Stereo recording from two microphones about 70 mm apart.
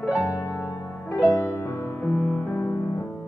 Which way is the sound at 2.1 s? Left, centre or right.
Centre.